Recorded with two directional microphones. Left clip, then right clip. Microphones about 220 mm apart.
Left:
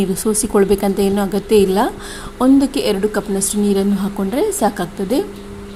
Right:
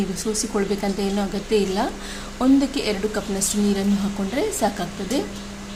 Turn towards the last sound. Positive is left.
turn(degrees=25)  # may be behind; listen again after turning